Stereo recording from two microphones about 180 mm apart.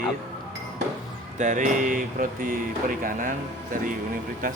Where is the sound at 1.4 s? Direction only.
45° right (ahead or behind).